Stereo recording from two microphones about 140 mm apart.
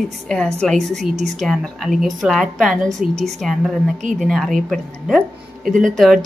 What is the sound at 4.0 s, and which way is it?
Speech, 65° right (ahead or behind).